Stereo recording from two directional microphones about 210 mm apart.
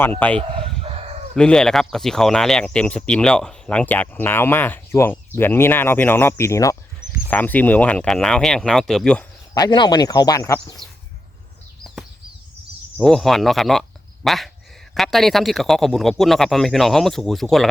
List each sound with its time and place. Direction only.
0.0 s speech: 10° left (ahead or behind)
0.5 s chicken: 25° right (ahead or behind)
1.4 s speech: 5° left (ahead or behind)
9.6 s speech: 20° left (ahead or behind)
13.0 s speech: centre (ahead or behind)